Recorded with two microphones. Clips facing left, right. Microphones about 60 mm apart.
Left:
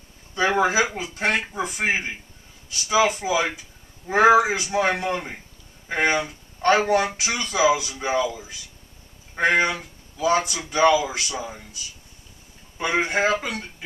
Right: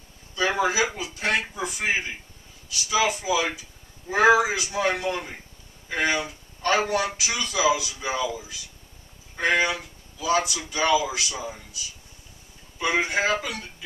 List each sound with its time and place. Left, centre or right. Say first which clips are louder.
0.6 s speech: left 3 dB; left
12.7 s speech: left 1 dB; left